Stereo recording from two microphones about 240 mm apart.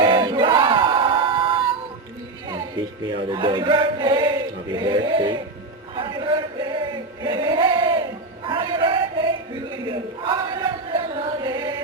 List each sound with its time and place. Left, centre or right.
0.0 s battle cry: centre
3.3 s male singing: centre
6.0 s chant: centre
8.4 s a sound: right
10.9 s choir: centre